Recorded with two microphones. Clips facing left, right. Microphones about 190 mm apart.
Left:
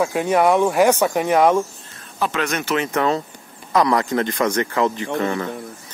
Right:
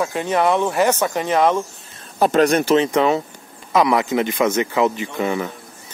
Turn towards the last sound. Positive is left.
turn(degrees=-10)  # may be behind; listen again after turning